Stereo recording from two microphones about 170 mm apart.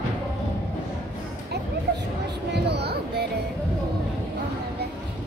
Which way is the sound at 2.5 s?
75° right (ahead or behind).